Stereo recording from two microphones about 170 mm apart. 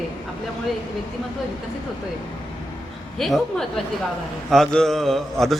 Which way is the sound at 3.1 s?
Centre (ahead or behind).